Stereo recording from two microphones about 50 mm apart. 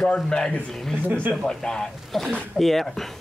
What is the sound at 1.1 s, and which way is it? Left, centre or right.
Speech, right.